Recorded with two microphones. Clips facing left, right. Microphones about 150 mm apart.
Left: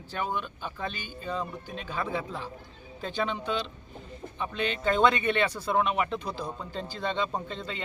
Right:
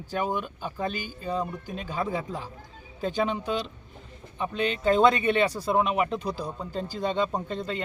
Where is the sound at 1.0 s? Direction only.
40° right (ahead or behind).